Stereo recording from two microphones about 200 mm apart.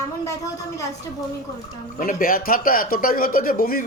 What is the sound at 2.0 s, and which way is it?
Speech, 45° left (ahead or behind).